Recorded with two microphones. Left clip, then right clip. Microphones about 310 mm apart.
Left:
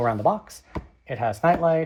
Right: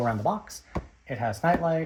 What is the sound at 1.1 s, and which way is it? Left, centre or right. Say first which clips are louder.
Speech: left 4 dB; centre.